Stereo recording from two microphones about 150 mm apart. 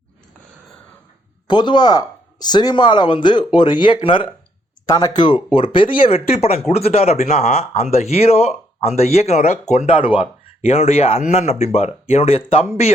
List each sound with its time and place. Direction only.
1.5 s speech: 30° left (ahead or behind)